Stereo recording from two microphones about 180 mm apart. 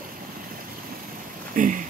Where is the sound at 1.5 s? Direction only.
50° right (ahead or behind).